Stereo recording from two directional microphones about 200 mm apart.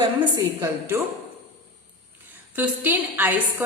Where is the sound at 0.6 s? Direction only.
10° right (ahead or behind).